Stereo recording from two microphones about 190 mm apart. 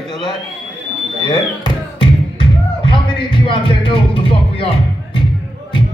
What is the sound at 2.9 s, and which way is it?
Music, 25° left (ahead or behind).